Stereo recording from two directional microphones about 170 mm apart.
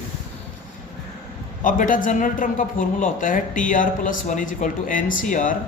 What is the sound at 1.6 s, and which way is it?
A man's voice, 50° left (ahead or behind).